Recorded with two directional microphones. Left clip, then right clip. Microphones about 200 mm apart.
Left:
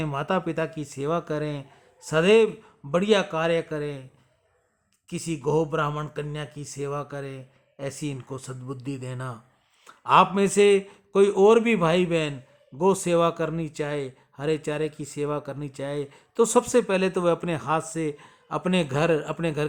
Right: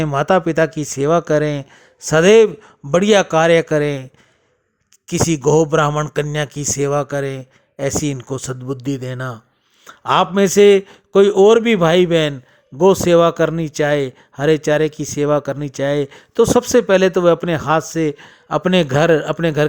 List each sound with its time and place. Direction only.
0.0 s a man's voice: 35° right (ahead or behind)